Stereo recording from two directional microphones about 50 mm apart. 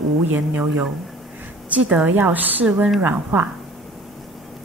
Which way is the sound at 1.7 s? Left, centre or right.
Right.